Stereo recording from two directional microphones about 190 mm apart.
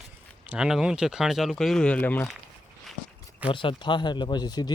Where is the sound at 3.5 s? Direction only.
25° left (ahead or behind).